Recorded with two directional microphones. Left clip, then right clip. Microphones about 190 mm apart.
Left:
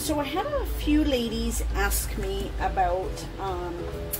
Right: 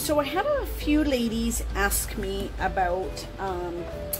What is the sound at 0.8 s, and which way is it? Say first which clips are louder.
A woman's voice: even; 25° right (ahead or behind).